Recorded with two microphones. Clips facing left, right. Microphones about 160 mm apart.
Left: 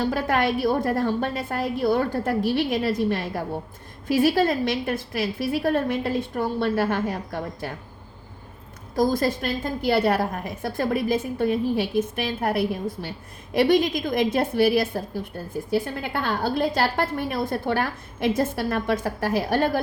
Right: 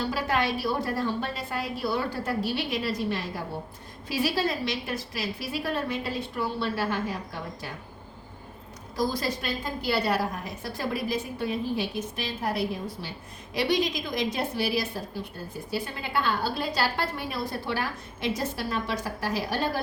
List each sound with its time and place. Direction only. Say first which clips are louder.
0.0 s a woman's voice: left 5 dB; 50° left (ahead or behind)
9.0 s a woman's voice: left 7 dB; 50° left (ahead or behind)